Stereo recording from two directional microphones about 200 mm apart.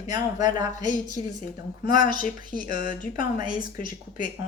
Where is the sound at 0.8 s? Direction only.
40° left (ahead or behind).